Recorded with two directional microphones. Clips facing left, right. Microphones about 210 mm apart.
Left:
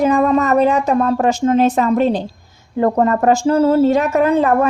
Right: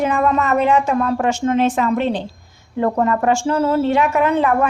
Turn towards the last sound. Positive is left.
turn(degrees=35)  # may be behind; listen again after turning